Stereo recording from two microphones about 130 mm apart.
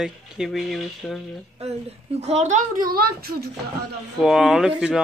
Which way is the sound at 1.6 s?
55° right (ahead or behind).